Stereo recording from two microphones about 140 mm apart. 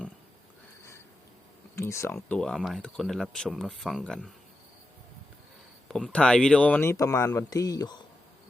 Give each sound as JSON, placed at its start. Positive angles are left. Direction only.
{"t": 1.8, "sound": "speech", "side_deg": 20}
{"t": 2.4, "sound": "speech", "side_deg": 5}
{"t": 5.9, "sound": "speech", "side_deg": 5}
{"t": 6.9, "sound": "speech", "side_deg": 25}